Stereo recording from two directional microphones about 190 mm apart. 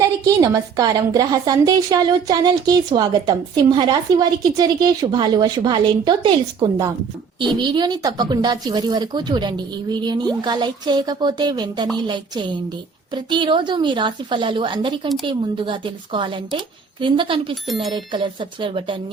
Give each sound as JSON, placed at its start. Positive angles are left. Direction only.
{"t": 0.3, "sound": "a woman's voice", "side_deg": -20}